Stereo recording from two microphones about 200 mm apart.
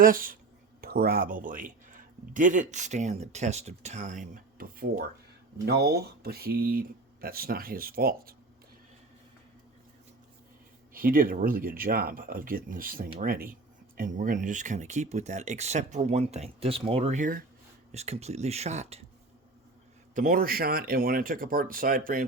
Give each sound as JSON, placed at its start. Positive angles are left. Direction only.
{"t": 0.0, "sound": "speech", "side_deg": -45}
{"t": 10.9, "sound": "speech", "side_deg": -45}
{"t": 20.1, "sound": "speech", "side_deg": -45}